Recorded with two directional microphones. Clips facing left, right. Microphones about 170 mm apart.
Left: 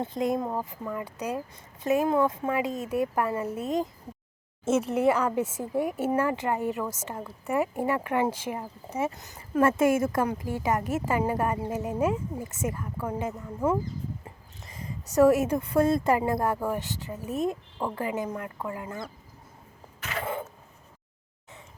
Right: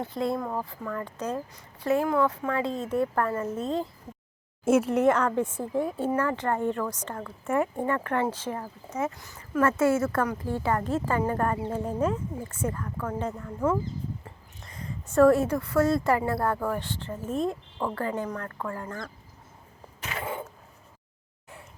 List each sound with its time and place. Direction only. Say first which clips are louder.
0.0 s a woman's voice: left 1 dB; 20° left (ahead or behind)
4.6 s a woman's voice: right 2 dB; 5° right (ahead or behind); by 13.7 s 10° left (ahead or behind)
15.1 s speech: right 1 dB; 10° left (ahead or behind)